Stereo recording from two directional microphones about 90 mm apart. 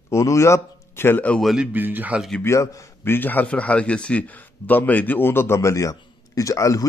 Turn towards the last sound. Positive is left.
turn(degrees=40)  # may be behind; listen again after turning